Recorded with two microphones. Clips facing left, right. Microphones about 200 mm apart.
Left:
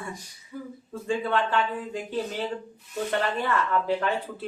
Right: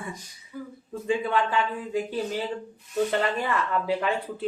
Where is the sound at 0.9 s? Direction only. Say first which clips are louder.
Right 1 dB; 15° right (ahead or behind).